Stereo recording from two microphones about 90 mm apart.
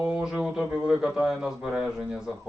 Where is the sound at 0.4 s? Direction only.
10° right (ahead or behind).